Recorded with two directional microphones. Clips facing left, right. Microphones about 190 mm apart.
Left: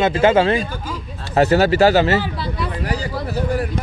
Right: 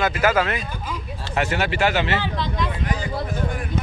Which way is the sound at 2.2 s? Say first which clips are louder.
Left 2 dB; 5° left (ahead or behind).